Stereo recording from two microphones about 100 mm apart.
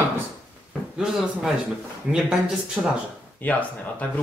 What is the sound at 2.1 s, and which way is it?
Speech, 10° right (ahead or behind).